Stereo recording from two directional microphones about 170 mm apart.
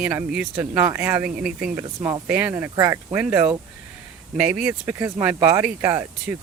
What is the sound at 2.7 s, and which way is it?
Speech, 20° right (ahead or behind).